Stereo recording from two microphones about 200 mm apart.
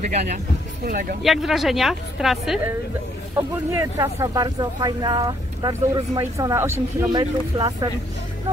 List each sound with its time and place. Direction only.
0.8 s speech: 45° right (ahead or behind)
1.2 s a woman's voice: centre (ahead or behind)
3.3 s speech: 15° right (ahead or behind)